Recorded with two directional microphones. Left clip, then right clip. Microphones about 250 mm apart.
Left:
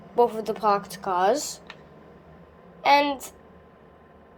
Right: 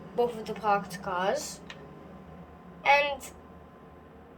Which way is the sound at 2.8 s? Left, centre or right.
Left.